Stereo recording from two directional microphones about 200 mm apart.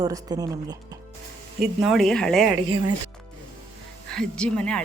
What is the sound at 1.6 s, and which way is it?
Speech, centre (ahead or behind).